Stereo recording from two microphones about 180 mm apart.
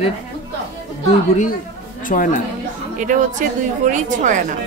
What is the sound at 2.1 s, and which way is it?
Speech, 45° left (ahead or behind).